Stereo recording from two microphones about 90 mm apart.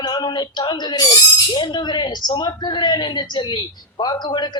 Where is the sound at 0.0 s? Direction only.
55° left (ahead or behind).